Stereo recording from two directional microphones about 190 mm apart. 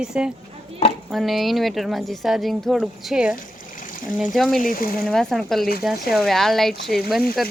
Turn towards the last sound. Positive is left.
turn(degrees=0)  # may be behind; listen again after turning